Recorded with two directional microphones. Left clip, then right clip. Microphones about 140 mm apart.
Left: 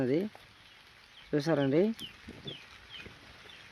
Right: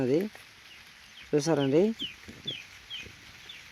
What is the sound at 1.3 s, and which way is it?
Speech, 15° right (ahead or behind).